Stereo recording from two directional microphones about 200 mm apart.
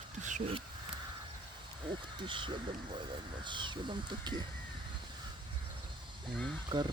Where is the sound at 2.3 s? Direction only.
25° right (ahead or behind).